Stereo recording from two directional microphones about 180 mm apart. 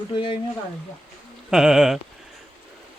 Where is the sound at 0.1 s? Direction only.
25° left (ahead or behind).